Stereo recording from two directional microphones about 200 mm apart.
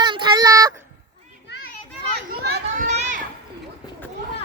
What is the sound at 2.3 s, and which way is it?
Children playing, 50° right (ahead or behind).